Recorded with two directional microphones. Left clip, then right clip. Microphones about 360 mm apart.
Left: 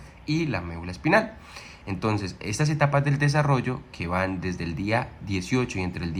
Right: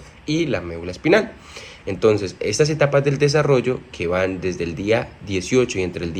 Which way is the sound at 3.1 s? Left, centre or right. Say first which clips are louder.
Right 9 dB; right.